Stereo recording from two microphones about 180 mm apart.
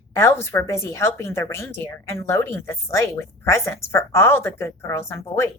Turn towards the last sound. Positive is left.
turn(degrees=15)  # may be behind; listen again after turning